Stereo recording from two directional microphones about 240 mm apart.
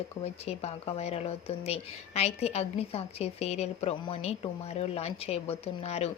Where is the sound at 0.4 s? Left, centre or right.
Left.